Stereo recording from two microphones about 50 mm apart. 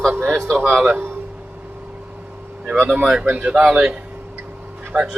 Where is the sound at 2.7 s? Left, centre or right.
Right.